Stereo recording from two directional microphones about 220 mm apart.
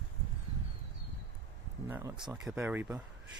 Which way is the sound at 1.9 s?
10° right (ahead or behind).